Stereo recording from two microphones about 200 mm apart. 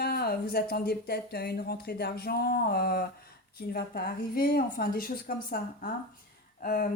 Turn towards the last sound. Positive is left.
turn(degrees=45)  # may be behind; listen again after turning